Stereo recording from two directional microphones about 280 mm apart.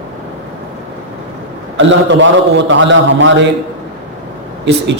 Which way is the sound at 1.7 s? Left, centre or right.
Right.